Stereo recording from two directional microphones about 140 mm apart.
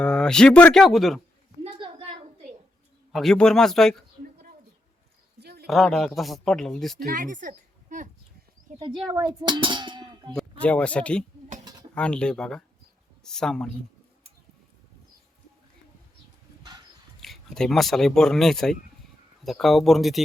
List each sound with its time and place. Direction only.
0.0 s speech: 5° left (ahead or behind)
1.6 s a sound: 40° right (ahead or behind)
3.1 s speech: centre (ahead or behind)
5.6 s speech: centre (ahead or behind)
7.0 s speech: 75° right (ahead or behind)
9.0 s speech: 25° right (ahead or behind)
10.3 s speech: 10° left (ahead or behind)
17.2 s speech: centre (ahead or behind)